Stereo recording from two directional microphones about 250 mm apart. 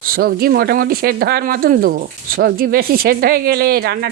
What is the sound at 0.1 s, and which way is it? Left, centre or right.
Speech, right.